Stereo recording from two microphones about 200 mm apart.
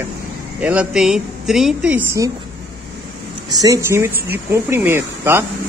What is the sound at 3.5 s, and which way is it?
Speech, 15° right (ahead or behind).